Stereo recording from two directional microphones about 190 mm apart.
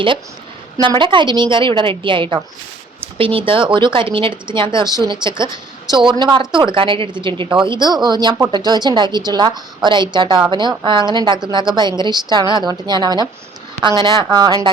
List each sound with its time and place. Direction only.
0.8 s speech: 25° right (ahead or behind)